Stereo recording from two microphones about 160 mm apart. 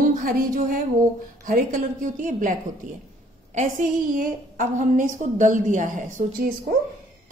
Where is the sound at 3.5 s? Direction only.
55° right (ahead or behind).